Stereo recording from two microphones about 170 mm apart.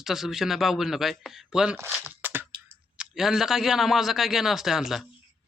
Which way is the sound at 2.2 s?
10° right (ahead or behind).